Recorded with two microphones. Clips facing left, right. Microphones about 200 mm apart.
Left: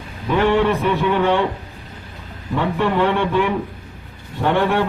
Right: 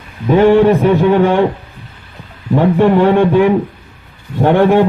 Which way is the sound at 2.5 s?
45° right (ahead or behind).